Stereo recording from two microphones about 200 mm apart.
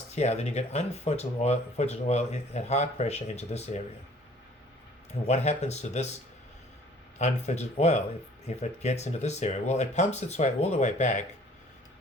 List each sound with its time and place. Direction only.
0.1 s speech: 35° left (ahead or behind)
5.3 s speech: 35° left (ahead or behind)
7.2 s speech: 35° left (ahead or behind)